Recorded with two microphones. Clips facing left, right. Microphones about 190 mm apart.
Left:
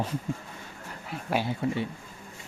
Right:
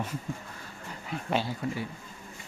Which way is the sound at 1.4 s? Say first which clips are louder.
Left 4 dB; 25° left (ahead or behind).